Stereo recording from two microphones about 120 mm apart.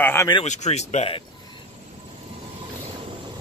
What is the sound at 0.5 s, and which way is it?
Speech, 70° left (ahead or behind).